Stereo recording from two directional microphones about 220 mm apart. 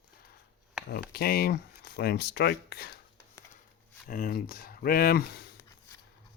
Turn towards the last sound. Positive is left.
turn(degrees=45)  # may be behind; listen again after turning